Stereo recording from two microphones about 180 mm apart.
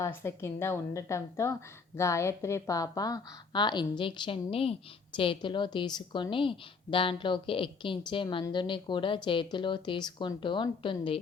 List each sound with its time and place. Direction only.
0.0 s a woman's voice: 15° left (ahead or behind); by 11.2 s 30° left (ahead or behind)